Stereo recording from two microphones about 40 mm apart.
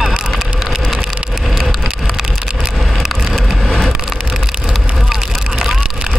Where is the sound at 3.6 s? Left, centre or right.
Centre.